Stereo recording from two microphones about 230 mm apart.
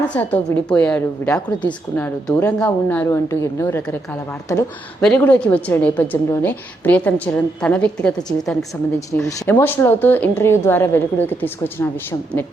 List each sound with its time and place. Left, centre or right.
0.1 s a woman's voice: centre